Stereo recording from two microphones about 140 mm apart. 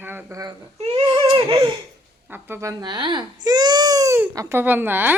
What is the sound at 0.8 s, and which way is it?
Baby cry, 40° right (ahead or behind).